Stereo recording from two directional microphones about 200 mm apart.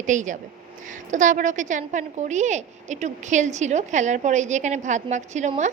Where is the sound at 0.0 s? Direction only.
40° right (ahead or behind).